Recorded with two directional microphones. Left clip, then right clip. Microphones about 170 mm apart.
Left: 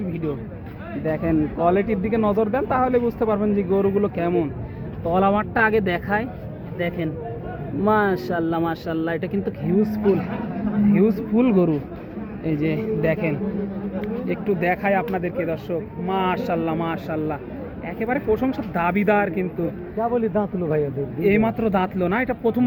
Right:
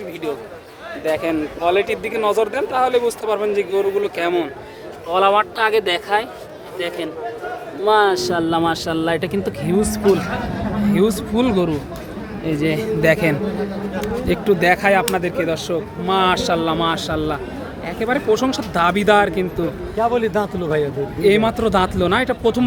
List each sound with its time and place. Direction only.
1.0 s speech: 10° right (ahead or behind)
12.5 s speech: 15° right (ahead or behind); by 13.3 s 30° right (ahead or behind)
14.6 s speech: 20° right (ahead or behind)
20.0 s a man's voice: 15° left (ahead or behind)
21.2 s speech: 10° right (ahead or behind)